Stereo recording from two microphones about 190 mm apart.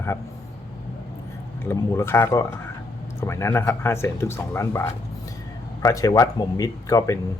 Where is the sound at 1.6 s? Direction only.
15° left (ahead or behind).